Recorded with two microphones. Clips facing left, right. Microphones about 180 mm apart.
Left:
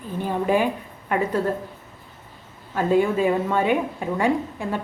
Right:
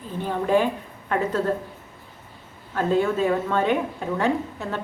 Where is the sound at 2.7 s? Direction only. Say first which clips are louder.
Left 2 dB; 10° left (ahead or behind).